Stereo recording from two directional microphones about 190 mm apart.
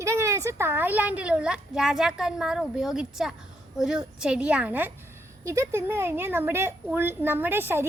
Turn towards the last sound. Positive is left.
turn(degrees=-10)  # may be behind; listen again after turning